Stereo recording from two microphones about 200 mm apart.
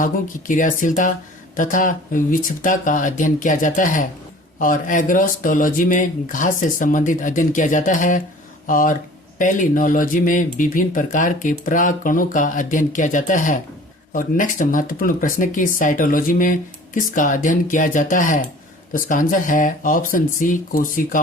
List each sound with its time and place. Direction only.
0.0 s speech: 40° left (ahead or behind)